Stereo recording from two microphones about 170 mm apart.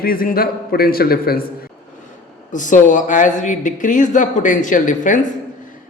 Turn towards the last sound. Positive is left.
turn(degrees=50)  # may be behind; listen again after turning